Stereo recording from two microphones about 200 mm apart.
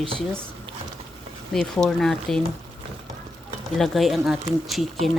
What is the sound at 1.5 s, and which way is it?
Speech, 5° left (ahead or behind).